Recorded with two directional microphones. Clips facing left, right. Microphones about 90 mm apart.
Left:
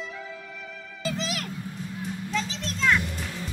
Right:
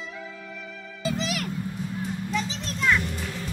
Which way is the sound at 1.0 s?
20° right (ahead or behind).